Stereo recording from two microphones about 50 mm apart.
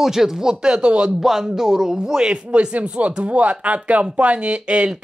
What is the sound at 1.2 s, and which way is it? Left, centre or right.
Speech, centre.